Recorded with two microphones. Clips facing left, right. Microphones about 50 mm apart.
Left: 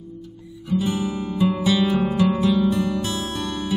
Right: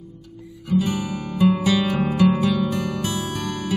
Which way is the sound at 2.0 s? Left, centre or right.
Centre.